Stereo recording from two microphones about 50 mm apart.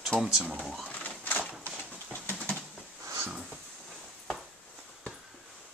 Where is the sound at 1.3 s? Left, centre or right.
Left.